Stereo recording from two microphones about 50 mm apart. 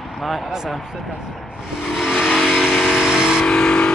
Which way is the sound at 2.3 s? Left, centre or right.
Centre.